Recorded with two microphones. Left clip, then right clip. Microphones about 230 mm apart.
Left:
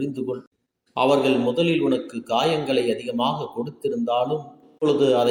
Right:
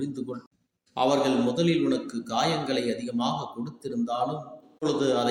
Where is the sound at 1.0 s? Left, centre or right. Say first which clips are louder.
Left 5 dB; centre.